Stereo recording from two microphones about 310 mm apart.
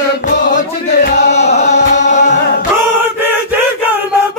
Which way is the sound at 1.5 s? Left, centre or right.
Left.